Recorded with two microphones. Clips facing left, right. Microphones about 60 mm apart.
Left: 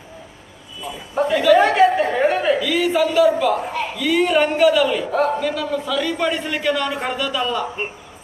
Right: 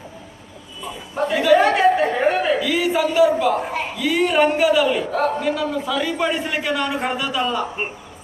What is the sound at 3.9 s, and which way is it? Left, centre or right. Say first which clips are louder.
A man's voice: left 1 dB; centre.